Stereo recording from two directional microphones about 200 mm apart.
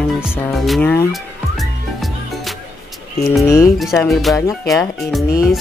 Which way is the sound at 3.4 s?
15° left (ahead or behind).